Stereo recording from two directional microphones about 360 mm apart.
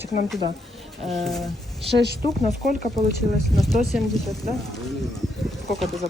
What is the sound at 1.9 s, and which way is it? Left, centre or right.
Speech, right.